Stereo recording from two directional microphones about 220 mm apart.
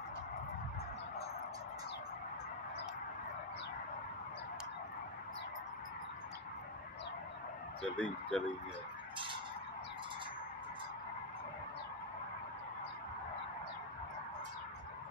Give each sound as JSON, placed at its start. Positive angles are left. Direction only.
{"t": 8.0, "sound": "speech", "side_deg": 5}